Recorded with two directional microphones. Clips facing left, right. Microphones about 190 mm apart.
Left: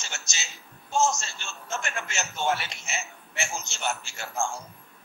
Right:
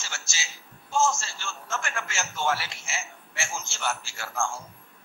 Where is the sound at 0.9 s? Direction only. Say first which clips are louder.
Even; 20° left (ahead or behind).